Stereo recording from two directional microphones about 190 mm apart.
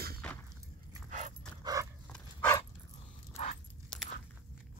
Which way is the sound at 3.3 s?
35° left (ahead or behind).